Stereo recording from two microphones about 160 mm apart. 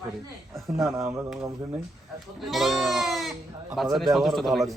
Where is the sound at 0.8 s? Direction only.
20° right (ahead or behind).